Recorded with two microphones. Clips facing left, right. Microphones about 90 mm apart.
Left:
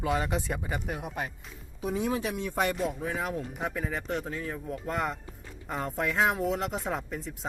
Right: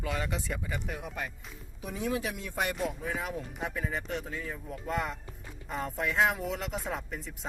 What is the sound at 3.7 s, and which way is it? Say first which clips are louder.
Speech: left 1 dB; 65° left (ahead or behind).